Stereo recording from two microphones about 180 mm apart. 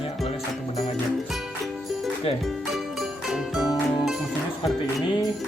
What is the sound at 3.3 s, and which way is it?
Music, centre (ahead or behind).